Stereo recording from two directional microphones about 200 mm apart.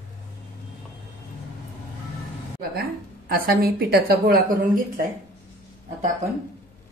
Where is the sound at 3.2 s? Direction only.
50° right (ahead or behind).